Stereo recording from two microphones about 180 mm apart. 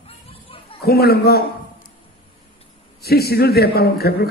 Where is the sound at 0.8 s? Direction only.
60° left (ahead or behind).